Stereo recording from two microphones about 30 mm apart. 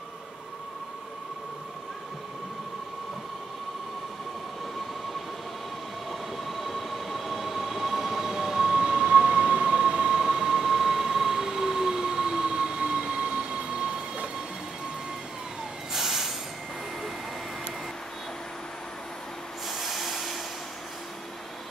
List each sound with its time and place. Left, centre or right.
6.3 s train: centre
9.0 s a sound: right
15.9 s vehicle: centre
19.7 s vehicle: centre